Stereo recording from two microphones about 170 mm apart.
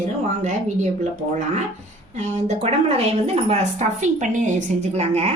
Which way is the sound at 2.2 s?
40° right (ahead or behind).